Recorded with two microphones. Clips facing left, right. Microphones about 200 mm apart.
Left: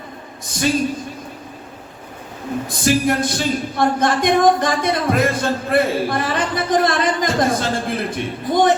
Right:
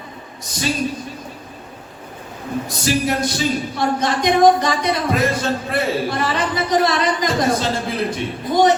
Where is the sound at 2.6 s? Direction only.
50° left (ahead or behind).